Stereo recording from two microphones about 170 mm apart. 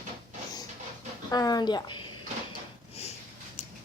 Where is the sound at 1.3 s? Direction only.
25° left (ahead or behind).